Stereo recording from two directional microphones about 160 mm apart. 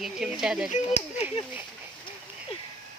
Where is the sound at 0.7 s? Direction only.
45° left (ahead or behind).